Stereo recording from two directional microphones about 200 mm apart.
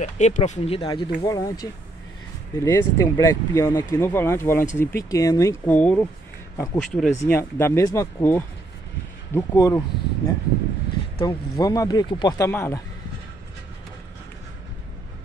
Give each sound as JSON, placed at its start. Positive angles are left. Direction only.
{"t": 0.0, "sound": "speech", "side_deg": 35}